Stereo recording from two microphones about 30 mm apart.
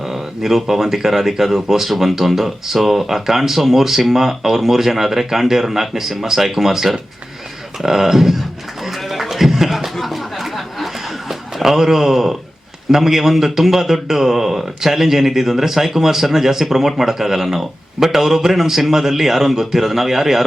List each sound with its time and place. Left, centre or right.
0.0 s a man's voice: centre
9.3 s a sound: centre
12.9 s speech: centre